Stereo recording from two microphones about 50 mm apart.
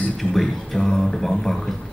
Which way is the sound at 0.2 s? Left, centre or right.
Centre.